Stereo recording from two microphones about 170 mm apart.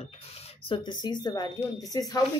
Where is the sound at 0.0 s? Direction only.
35° left (ahead or behind).